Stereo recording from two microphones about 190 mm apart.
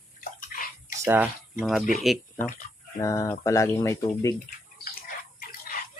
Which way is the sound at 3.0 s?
15° left (ahead or behind).